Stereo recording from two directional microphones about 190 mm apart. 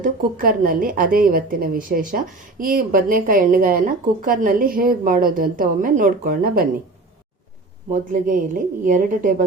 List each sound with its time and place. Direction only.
0.0 s a woman's voice: 45° right (ahead or behind)
7.9 s a woman's voice: 45° right (ahead or behind)